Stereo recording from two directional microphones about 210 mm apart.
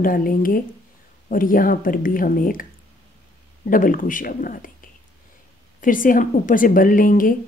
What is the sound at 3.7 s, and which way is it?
A woman's voice, 40° left (ahead or behind).